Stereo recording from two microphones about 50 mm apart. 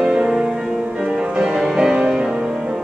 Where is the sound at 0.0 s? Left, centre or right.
Centre.